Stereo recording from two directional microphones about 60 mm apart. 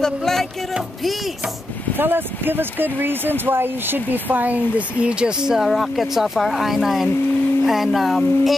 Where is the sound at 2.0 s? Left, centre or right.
Right.